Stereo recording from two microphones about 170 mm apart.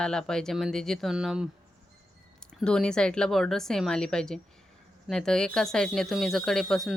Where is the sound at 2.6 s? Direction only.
5° left (ahead or behind).